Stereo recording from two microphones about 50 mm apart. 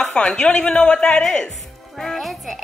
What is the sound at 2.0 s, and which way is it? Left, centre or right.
Speech, centre.